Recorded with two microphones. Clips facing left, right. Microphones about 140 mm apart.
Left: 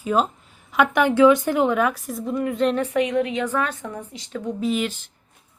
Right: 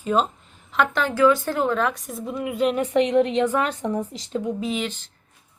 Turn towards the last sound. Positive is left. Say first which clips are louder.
# left 3 dB
turn(degrees=5)  # may be behind; listen again after turning